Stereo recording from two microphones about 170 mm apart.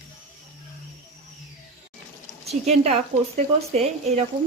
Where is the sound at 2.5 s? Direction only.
40° right (ahead or behind).